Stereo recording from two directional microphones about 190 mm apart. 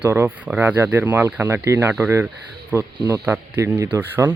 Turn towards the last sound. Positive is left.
turn(degrees=-10)  # may be behind; listen again after turning